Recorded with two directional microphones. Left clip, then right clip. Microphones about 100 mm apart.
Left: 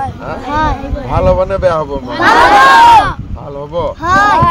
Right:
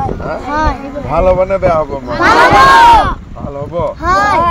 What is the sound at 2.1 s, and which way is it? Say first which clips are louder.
Speech: even; centre (ahead or behind).